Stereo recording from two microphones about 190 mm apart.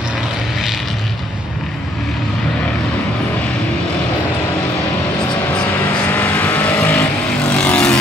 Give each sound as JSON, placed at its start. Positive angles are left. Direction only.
{"t": 6.1, "sound": "vehicle", "side_deg": 10}